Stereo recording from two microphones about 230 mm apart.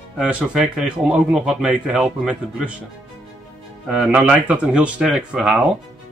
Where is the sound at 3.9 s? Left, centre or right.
Centre.